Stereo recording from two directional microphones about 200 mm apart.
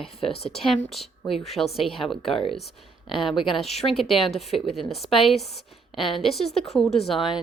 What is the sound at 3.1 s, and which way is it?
Speech, 25° left (ahead or behind).